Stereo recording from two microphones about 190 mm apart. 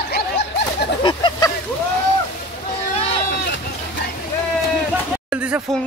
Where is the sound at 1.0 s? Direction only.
25° left (ahead or behind).